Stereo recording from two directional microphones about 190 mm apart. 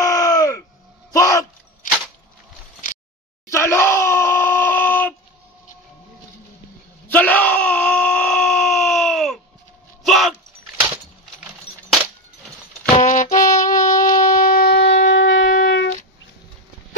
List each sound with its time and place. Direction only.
0.0 s a sound: 15° left (ahead or behind)
3.4 s screaming: 15° left (ahead or behind)
7.1 s screaming: 10° left (ahead or behind)
10.0 s a sound: centre (ahead or behind)
12.9 s shofar: 40° left (ahead or behind); by 15.0 s 60° left (ahead or behind)
15.1 s shofar: 90° left
15.6 s music: 90° left